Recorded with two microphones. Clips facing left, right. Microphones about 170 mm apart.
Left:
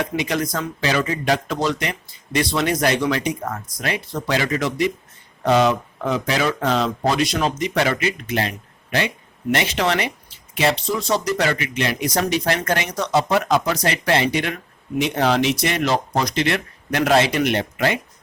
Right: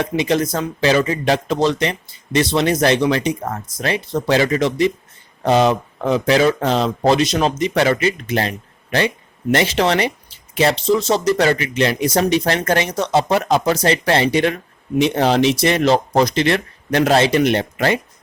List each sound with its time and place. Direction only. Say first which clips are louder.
0.2 s speech: right 5 dB; 25° right (ahead or behind)